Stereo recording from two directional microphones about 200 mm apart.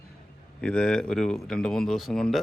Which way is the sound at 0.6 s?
5° left (ahead or behind).